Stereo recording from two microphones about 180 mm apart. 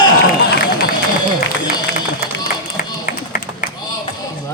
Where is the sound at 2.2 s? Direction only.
55° left (ahead or behind).